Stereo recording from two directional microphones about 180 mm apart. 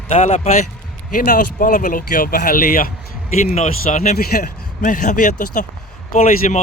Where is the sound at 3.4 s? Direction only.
40° left (ahead or behind).